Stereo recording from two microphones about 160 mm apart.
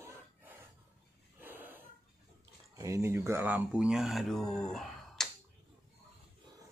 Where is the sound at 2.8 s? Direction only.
15° right (ahead or behind); by 5.3 s 5° left (ahead or behind).